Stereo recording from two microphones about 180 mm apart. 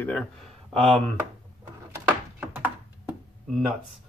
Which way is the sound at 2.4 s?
10° right (ahead or behind).